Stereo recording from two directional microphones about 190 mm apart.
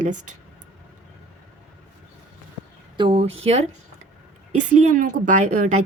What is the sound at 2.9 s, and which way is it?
Speech, 30° right (ahead or behind).